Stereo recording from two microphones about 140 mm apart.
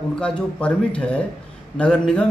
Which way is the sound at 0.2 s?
10° left (ahead or behind).